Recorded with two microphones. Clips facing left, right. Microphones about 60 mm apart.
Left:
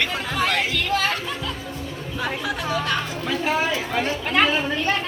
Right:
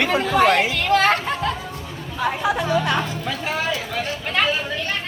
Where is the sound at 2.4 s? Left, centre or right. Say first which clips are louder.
Right 7 dB; right.